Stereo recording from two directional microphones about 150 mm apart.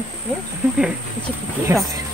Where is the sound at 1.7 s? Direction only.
20° right (ahead or behind).